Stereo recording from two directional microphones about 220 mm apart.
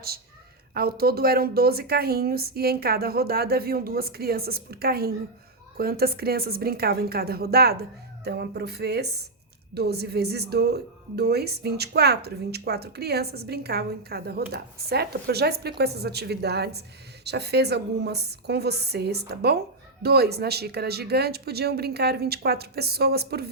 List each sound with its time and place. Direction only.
0.7 s a woman's voice: 45° right (ahead or behind)